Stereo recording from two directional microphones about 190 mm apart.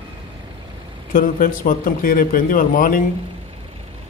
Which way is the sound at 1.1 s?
45° left (ahead or behind).